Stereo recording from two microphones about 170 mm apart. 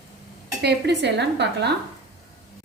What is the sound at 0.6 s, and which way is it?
Speech, 75° right (ahead or behind).